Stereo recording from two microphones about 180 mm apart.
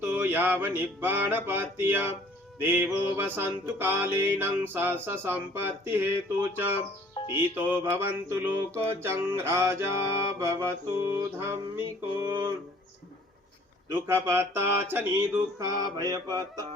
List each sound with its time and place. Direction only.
0.0 s music: 10° right (ahead or behind)
7.1 s music: 30° left (ahead or behind)
7.5 s music: 10° right (ahead or behind)
14.1 s music: 15° right (ahead or behind)